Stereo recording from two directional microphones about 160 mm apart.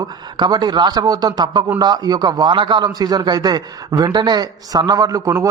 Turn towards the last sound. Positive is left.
turn(degrees=-20)  # may be behind; listen again after turning